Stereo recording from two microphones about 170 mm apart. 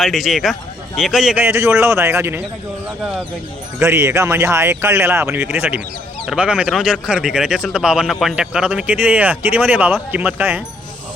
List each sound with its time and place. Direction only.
0.0 s speech: centre (ahead or behind)
1.5 s speech: 15° right (ahead or behind)
3.8 s speech: 15° right (ahead or behind)